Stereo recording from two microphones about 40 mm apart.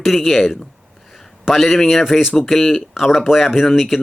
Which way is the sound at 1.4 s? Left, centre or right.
Centre.